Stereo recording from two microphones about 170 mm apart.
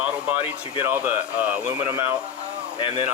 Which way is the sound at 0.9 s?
10° right (ahead or behind).